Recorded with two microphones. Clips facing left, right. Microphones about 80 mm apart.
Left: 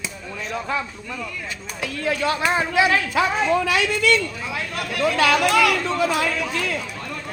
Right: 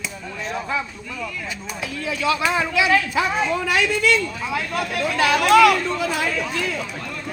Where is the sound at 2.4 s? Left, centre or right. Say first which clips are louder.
Left 1 dB; left.